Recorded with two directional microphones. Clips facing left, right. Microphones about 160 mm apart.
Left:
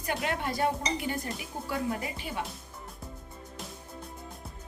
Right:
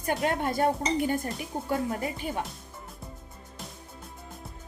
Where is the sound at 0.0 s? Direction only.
45° right (ahead or behind).